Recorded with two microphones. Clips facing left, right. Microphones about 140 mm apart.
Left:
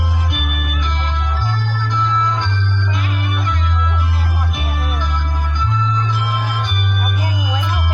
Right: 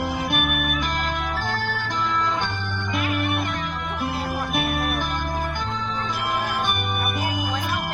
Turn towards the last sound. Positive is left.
turn(degrees=-55)  # may be behind; listen again after turning